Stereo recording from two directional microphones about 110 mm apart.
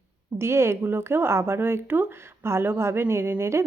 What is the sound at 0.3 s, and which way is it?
Speech, 25° right (ahead or behind).